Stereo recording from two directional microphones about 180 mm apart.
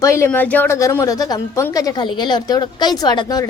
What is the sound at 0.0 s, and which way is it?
A woman's voice, 15° left (ahead or behind).